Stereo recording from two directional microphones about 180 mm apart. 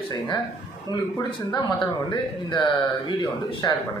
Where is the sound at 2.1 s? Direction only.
25° left (ahead or behind).